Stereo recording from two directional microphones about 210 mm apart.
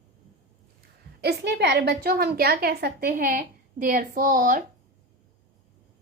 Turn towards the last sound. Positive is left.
turn(degrees=-40)  # may be behind; listen again after turning